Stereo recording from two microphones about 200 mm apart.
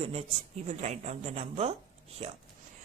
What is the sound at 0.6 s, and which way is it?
A woman's voice, 35° right (ahead or behind).